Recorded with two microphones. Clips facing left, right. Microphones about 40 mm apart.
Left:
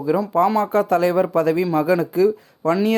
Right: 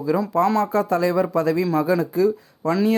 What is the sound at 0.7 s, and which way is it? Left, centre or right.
Speech, left.